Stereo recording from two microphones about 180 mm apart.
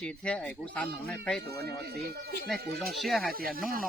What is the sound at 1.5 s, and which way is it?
Speech, 65° right (ahead or behind).